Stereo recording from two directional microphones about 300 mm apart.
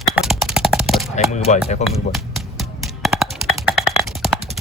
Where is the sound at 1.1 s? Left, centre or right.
Left.